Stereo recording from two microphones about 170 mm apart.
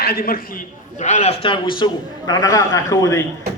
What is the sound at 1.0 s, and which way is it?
Speech, 45° left (ahead or behind).